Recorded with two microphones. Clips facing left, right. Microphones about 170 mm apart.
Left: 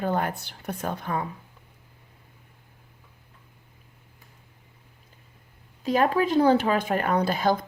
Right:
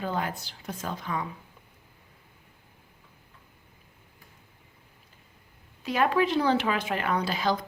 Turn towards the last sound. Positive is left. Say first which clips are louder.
# left 4 dB
turn(degrees=50)  # may be behind; listen again after turning